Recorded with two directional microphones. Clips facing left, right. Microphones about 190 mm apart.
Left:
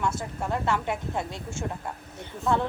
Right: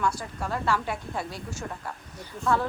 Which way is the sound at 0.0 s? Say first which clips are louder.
Even; 20° left (ahead or behind).